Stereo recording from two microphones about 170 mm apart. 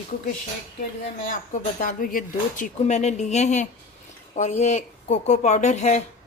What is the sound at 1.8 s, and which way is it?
Speech, 50° left (ahead or behind).